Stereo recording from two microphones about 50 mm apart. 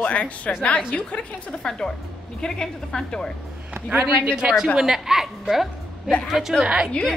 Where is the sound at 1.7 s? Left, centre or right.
Centre.